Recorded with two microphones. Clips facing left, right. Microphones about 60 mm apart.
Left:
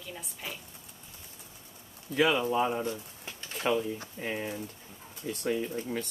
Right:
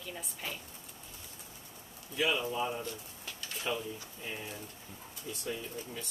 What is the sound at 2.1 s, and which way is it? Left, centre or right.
Speech, left.